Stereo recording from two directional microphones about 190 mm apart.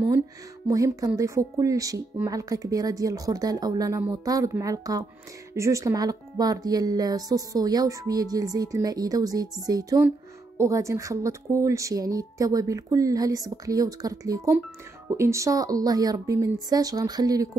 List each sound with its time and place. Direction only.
0.7 s speech: 20° right (ahead or behind)